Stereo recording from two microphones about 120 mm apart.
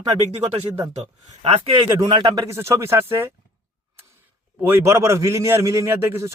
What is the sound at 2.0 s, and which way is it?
Speech, 45° right (ahead or behind).